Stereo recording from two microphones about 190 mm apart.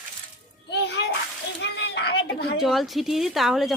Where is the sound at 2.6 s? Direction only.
Centre (ahead or behind).